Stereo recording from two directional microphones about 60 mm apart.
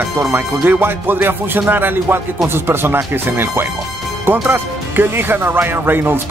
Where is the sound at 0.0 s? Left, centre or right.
Right.